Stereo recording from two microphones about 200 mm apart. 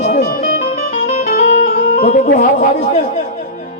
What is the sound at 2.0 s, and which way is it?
Speech, 40° left (ahead or behind).